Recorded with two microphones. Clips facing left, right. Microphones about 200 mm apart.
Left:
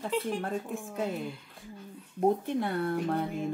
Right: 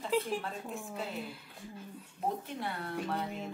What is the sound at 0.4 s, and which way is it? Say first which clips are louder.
Speech: left 6 dB; 50° left (ahead or behind).